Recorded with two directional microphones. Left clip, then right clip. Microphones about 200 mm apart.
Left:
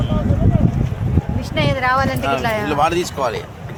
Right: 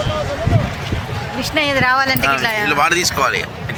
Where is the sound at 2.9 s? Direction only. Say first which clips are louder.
Right 4 dB; 25° left (ahead or behind).